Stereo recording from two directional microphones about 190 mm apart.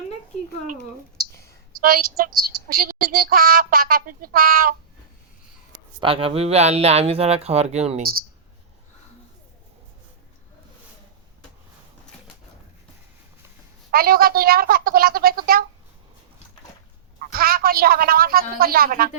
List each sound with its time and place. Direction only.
1.8 s a man's voice: 50° right (ahead or behind)
5.7 s speech: 25° right (ahead or behind)
13.9 s a man's voice: 50° right (ahead or behind)
17.2 s a man's voice: 50° right (ahead or behind)